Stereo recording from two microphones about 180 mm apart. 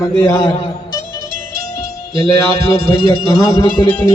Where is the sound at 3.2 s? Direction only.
20° left (ahead or behind).